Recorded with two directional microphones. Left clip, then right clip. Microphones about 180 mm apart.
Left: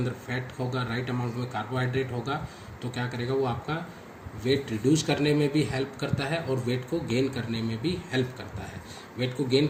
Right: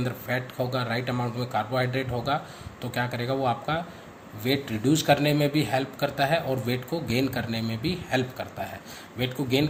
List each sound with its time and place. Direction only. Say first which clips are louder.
0.0 s a man's voice: right 4 dB; 50° right (ahead or behind)